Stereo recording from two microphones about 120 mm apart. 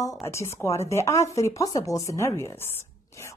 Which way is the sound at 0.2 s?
25° left (ahead or behind).